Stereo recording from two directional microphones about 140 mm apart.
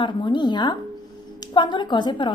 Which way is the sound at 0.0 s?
35° left (ahead or behind).